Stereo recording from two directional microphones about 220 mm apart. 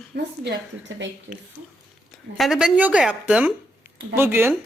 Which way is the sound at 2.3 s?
Centre (ahead or behind).